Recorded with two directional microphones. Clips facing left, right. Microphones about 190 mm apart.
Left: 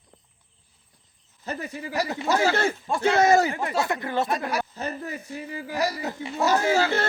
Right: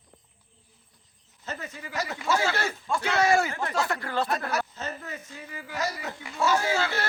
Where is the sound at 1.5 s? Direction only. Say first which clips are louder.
Left 5 dB; 35° left (ahead or behind).